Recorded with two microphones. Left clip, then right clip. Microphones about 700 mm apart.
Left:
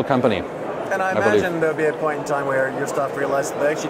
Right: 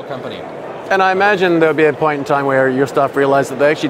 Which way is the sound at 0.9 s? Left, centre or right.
Right.